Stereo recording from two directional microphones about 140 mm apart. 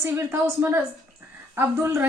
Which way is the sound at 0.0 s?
20° right (ahead or behind).